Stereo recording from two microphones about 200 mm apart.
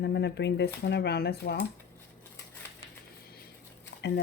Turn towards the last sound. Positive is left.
turn(degrees=60)  # may be behind; listen again after turning